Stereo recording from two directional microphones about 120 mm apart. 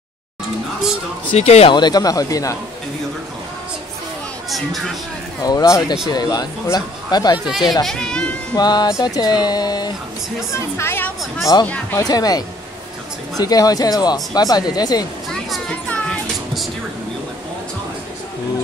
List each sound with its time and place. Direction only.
1.3 s speech: 60° left (ahead or behind)
1.7 s speech: 35° left (ahead or behind)
4.5 s speech: centre (ahead or behind)
5.4 s speech: 30° left (ahead or behind)
7.3 s speech: 5° right (ahead or behind)
8.5 s speech: 35° left (ahead or behind)
10.5 s a woman's voice: 20° left (ahead or behind)
12.0 s speech: 30° left (ahead or behind)
15.3 s a sound: 5° left (ahead or behind)